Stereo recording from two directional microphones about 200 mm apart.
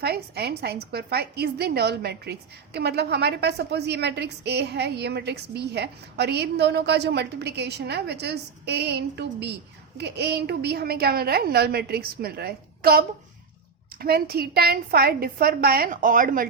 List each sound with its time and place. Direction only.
0.0 s a woman's voice: 55° right (ahead or behind)